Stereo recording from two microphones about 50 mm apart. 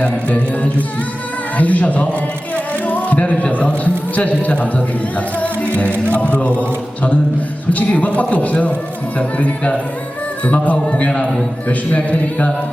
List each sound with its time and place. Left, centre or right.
0.0 s a man's voice: left
6.1 s a man's voice: left
6.6 s a sound: left
7.7 s a man's voice: left